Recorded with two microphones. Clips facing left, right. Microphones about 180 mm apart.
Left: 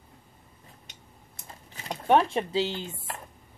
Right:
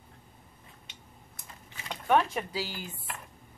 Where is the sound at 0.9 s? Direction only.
40° left (ahead or behind).